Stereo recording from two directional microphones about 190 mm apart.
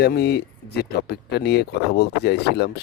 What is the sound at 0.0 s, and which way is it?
Speech, 60° left (ahead or behind).